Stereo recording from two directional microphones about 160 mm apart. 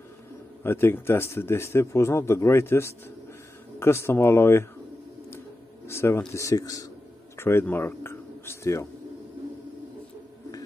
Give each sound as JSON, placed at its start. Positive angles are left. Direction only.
{"t": 0.7, "sound": "speech", "side_deg": 15}
{"t": 5.9, "sound": "speech", "side_deg": 15}